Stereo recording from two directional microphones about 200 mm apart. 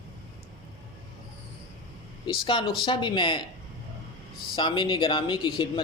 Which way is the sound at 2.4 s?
25° left (ahead or behind).